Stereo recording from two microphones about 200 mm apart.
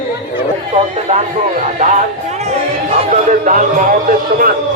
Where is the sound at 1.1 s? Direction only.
35° right (ahead or behind).